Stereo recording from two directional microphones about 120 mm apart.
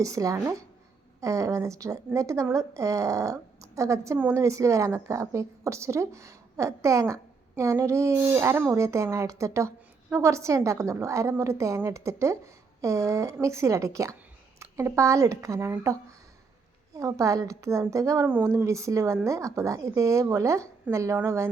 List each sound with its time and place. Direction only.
0.0 s a woman's voice: 25° right (ahead or behind)